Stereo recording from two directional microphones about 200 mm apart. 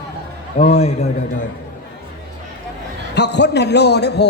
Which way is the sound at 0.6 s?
30° left (ahead or behind).